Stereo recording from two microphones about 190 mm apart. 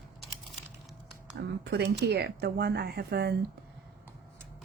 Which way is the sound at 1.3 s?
60° right (ahead or behind).